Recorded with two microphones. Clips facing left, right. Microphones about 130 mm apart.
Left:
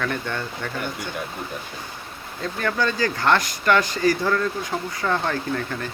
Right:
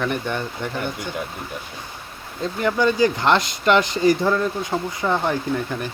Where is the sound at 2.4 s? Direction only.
20° right (ahead or behind).